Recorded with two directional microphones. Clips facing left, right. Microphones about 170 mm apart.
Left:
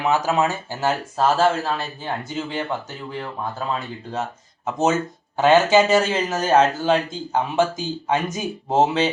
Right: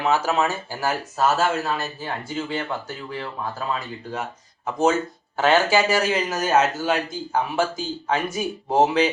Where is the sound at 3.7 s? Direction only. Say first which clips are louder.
Left 2 dB; 25° left (ahead or behind).